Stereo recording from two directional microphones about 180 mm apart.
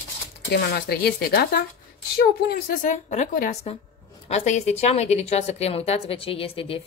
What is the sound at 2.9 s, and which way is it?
A woman's voice, 40° left (ahead or behind).